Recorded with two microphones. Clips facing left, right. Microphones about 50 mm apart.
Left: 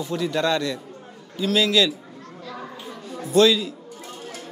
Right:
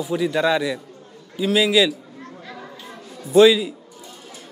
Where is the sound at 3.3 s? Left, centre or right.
Centre.